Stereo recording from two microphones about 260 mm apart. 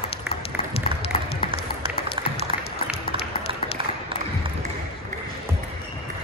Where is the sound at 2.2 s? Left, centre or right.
Centre.